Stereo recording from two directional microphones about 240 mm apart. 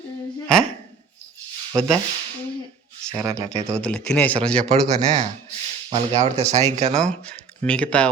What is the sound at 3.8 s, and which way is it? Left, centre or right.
Speech, centre.